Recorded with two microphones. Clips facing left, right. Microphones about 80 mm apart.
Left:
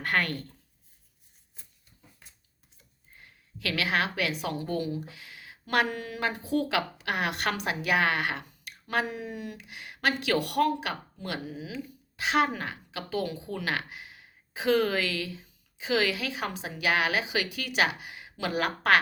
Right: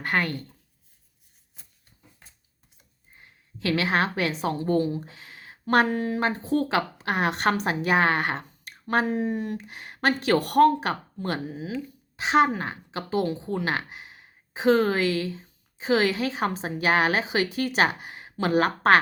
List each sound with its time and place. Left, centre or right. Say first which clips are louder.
0.0 s speech: right 2 dB; right
3.2 s a woman's voice: right 7 dB; right
12.1 s a woman's voice: right 5 dB; right